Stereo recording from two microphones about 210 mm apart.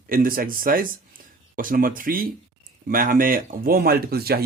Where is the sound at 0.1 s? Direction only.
40° right (ahead or behind).